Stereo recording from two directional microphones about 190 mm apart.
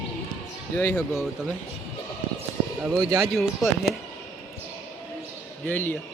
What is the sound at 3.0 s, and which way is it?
Speech, 15° right (ahead or behind).